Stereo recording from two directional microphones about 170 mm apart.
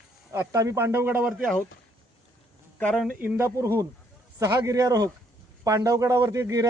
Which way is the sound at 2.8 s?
10° left (ahead or behind).